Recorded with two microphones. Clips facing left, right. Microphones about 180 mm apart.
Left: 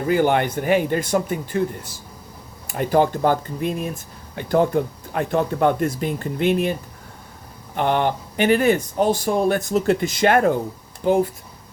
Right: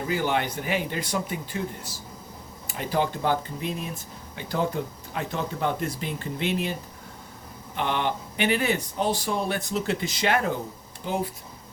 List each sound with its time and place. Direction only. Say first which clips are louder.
0.1 s speech: left 9 dB; 55° left (ahead or behind)
7.8 s speech: left 7 dB; 45° left (ahead or behind)